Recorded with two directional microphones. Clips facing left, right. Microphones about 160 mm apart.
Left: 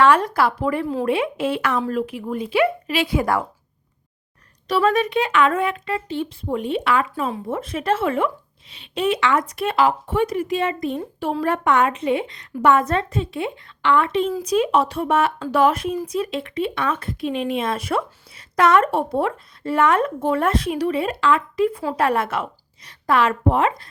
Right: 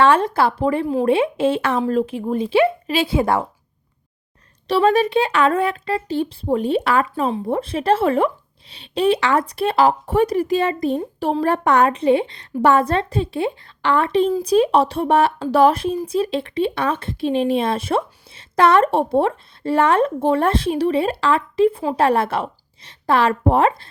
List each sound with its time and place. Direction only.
0.0 s speech: 25° right (ahead or behind)
4.7 s speech: 30° right (ahead or behind)